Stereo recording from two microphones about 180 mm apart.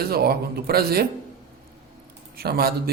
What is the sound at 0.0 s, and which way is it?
A man's voice, 60° right (ahead or behind).